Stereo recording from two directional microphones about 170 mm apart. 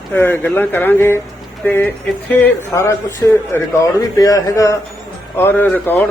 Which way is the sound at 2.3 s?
15° left (ahead or behind).